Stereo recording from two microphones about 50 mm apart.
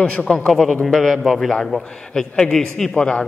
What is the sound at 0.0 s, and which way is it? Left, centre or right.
Speech, left.